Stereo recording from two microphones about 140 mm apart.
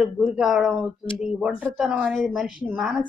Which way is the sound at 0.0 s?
5° right (ahead or behind).